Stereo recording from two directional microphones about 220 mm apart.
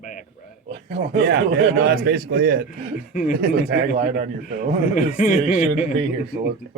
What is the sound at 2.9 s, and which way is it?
Speech, 35° left (ahead or behind).